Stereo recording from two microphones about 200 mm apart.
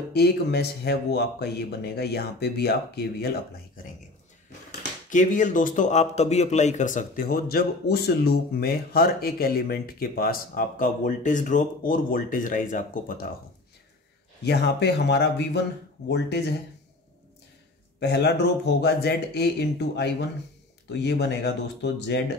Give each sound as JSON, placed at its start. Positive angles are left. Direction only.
{"t": 0.1, "sound": "a man's voice", "side_deg": 55}
{"t": 5.1, "sound": "a man's voice", "side_deg": 40}
{"t": 14.4, "sound": "speech", "side_deg": 55}
{"t": 18.0, "sound": "speech", "side_deg": 55}